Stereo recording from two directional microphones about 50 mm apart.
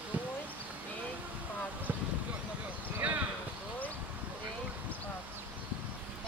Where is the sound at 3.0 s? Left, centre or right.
Right.